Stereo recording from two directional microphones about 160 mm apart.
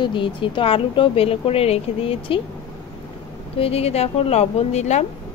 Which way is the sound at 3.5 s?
40° left (ahead or behind).